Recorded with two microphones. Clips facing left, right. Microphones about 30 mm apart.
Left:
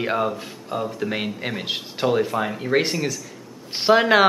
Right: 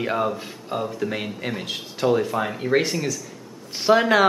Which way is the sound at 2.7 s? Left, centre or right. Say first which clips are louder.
Left 1 dB; centre.